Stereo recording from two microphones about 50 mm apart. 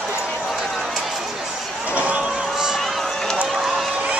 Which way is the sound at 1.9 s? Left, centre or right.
Right.